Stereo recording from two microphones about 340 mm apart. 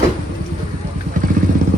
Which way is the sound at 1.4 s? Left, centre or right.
Right.